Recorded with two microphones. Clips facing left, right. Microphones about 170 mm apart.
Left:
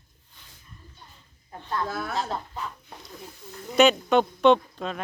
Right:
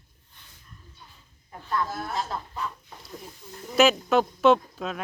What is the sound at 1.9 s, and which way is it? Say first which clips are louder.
Speech: left 2 dB; 70° left (ahead or behind).